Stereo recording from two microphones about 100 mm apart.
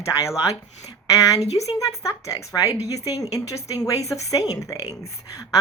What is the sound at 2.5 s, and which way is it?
Speech, 40° left (ahead or behind).